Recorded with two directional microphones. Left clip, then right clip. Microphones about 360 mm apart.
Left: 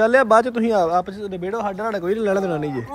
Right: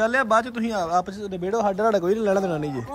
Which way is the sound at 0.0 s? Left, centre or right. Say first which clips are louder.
Left 6 dB; centre.